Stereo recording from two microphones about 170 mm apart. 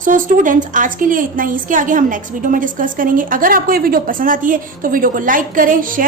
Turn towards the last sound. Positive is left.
turn(degrees=-55)  # may be behind; listen again after turning